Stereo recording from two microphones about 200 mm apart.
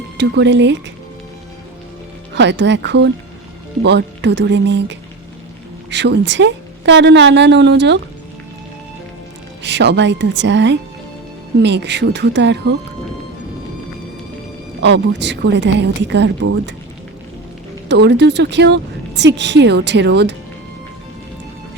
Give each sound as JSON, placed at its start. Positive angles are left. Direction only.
{"t": 0.2, "sound": "speech", "side_deg": -60}
{"t": 2.3, "sound": "speech", "side_deg": -60}
{"t": 9.6, "sound": "speech", "side_deg": -60}
{"t": 14.8, "sound": "speech", "side_deg": -60}
{"t": 17.8, "sound": "speech", "side_deg": -55}